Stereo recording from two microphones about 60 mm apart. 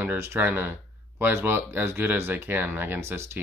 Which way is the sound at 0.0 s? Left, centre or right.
Right.